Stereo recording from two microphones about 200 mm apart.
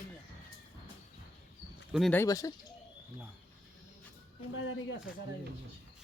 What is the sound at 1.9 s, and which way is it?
Speech, centre (ahead or behind).